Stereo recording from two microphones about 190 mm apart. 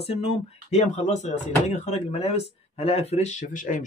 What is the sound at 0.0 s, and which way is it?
Speech, 30° left (ahead or behind).